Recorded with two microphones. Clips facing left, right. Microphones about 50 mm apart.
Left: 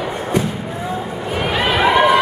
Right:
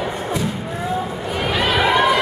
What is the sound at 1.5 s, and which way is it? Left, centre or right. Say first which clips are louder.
Run: left 2 dB; centre.